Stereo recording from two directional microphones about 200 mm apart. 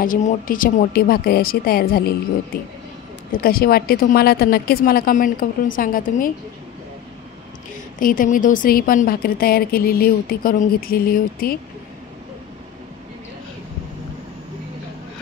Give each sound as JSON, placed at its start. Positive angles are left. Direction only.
{"t": 0.0, "sound": "a woman's voice", "side_deg": 40}
{"t": 8.0, "sound": "a woman's voice", "side_deg": 45}